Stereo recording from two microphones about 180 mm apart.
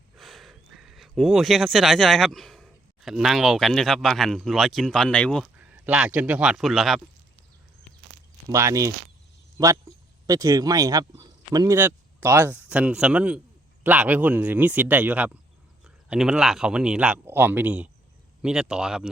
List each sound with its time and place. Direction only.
0.2 s speech: centre (ahead or behind)
5.5 s a man's voice: 5° right (ahead or behind)
8.4 s speech: 15° right (ahead or behind)